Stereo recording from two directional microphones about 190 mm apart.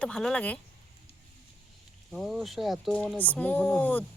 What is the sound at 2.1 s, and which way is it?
Speech, centre (ahead or behind).